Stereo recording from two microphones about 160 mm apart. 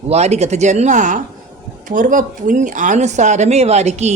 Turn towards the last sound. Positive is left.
turn(degrees=-45)  # may be behind; listen again after turning